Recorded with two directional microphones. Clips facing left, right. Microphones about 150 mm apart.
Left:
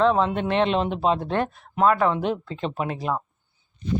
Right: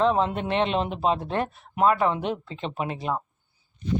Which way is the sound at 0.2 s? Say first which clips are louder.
Left 2 dB; 35° right (ahead or behind).